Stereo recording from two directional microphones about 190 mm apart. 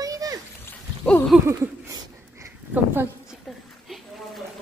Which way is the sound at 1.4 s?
15° right (ahead or behind).